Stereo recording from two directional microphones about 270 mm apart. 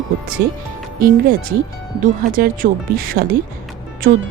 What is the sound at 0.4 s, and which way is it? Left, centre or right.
Speech, right.